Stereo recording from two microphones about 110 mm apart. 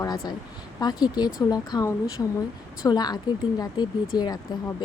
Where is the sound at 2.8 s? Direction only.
35° left (ahead or behind).